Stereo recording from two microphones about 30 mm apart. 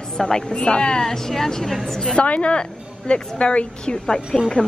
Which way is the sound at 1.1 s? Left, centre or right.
Centre.